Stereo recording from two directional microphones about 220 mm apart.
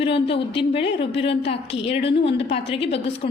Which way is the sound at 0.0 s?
25° left (ahead or behind).